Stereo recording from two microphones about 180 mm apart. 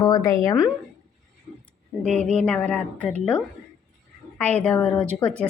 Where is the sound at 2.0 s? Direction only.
Centre (ahead or behind).